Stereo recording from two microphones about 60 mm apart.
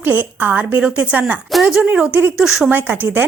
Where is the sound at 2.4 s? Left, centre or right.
Centre.